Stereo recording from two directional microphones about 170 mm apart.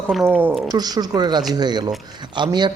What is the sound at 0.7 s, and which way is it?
Speech, 25° right (ahead or behind).